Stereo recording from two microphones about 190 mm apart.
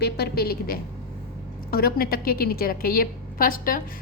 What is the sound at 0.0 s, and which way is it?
A woman's voice, 55° left (ahead or behind).